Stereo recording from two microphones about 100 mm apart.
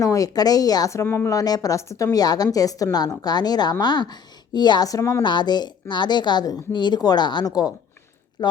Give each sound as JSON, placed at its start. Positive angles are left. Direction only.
{"t": 0.0, "sound": "a woman's voice", "side_deg": 35}
{"t": 1.3, "sound": "a woman's voice", "side_deg": 40}